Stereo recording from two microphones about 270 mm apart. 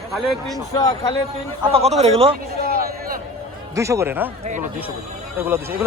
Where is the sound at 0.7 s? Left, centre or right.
Centre.